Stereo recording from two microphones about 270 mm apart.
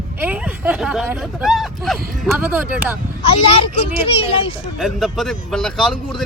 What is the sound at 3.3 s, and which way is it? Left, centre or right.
Speech, centre.